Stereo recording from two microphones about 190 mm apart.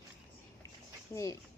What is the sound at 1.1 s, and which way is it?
Speech, 15° left (ahead or behind).